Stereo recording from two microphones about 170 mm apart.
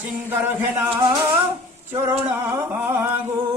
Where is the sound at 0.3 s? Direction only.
10° right (ahead or behind).